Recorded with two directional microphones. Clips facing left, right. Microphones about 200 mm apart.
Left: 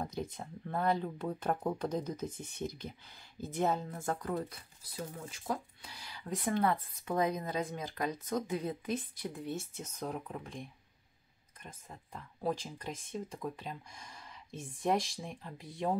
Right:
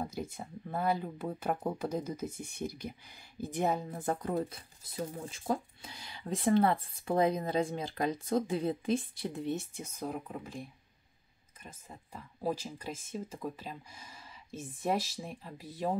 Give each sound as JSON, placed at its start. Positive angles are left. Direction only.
{"t": 0.0, "sound": "speech", "side_deg": -5}